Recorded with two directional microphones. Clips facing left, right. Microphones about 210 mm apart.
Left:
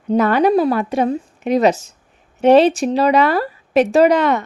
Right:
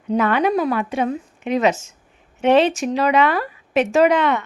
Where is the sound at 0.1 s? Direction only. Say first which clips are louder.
Left 4 dB; 40° left (ahead or behind).